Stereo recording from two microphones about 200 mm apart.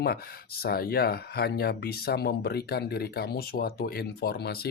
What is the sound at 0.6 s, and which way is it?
Speech, 50° left (ahead or behind).